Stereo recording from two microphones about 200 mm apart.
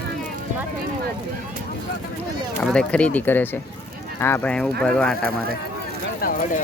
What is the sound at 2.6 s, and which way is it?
Speech, 5° left (ahead or behind).